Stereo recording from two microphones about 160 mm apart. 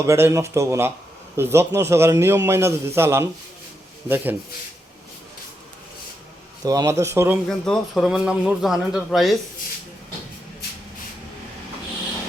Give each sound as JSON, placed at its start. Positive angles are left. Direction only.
{"t": 0.0, "sound": "a man's voice", "side_deg": -20}
{"t": 6.7, "sound": "a man's voice", "side_deg": -20}
{"t": 7.6, "sound": "a man's voice", "side_deg": 5}